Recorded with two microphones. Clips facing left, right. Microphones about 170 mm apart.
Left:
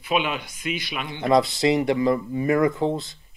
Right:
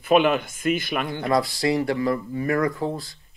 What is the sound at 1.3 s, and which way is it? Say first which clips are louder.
Speech: left 3 dB; 20° left (ahead or behind).